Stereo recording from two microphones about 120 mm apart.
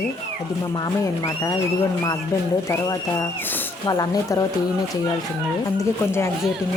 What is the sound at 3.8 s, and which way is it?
Speech, 30° left (ahead or behind).